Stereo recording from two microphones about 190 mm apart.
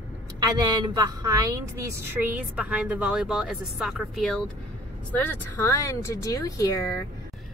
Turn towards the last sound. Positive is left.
turn(degrees=15)  # may be behind; listen again after turning